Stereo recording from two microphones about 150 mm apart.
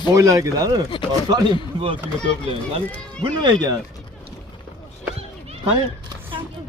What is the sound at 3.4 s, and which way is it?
Speech, 25° right (ahead or behind).